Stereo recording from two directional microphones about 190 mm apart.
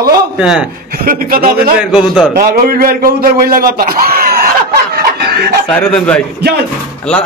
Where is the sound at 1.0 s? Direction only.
50° right (ahead or behind).